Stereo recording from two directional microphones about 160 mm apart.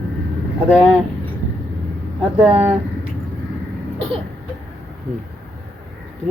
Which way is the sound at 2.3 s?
35° right (ahead or behind).